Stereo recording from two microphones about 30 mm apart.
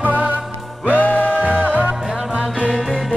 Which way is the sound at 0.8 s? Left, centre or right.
Left.